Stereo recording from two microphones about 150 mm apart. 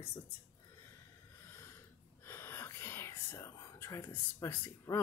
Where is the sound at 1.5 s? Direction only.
15° left (ahead or behind).